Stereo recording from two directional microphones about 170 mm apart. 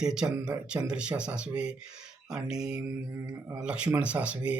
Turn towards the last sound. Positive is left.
turn(degrees=-5)  # may be behind; listen again after turning